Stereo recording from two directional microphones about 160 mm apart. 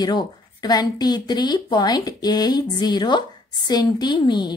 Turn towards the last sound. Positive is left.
turn(degrees=25)  # may be behind; listen again after turning